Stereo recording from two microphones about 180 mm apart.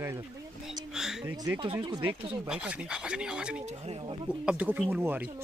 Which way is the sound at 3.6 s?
35° right (ahead or behind).